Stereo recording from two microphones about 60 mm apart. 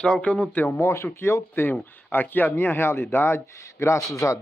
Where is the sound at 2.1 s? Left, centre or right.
Left.